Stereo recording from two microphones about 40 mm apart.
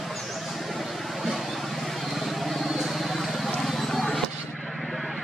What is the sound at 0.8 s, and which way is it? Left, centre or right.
Vehicle, centre.